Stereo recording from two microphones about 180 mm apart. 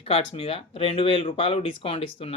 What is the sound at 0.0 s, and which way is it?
Speech, 30° left (ahead or behind).